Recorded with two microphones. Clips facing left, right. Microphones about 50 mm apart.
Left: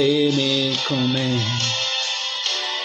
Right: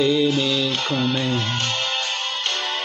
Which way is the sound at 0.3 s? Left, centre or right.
Centre.